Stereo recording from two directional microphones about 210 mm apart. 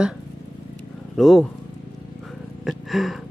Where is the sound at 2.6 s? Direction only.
Centre (ahead or behind).